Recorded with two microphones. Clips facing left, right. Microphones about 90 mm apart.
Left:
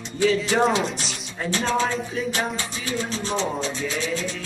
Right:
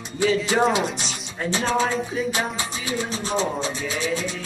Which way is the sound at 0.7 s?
15° right (ahead or behind).